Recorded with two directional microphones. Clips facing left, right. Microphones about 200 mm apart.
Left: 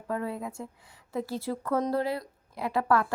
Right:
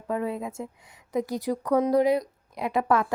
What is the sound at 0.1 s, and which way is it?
Speech, 20° right (ahead or behind).